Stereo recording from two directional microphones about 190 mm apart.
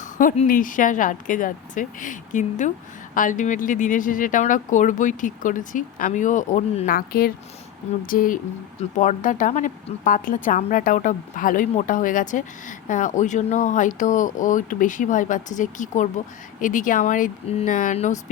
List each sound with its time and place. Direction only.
0.0 s speech: 45° left (ahead or behind)